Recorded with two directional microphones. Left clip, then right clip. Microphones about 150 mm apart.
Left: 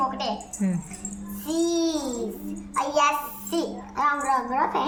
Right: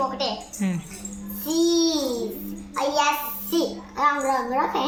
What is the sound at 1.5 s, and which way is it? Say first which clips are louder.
Babbling: right 3 dB; 40° left (ahead or behind).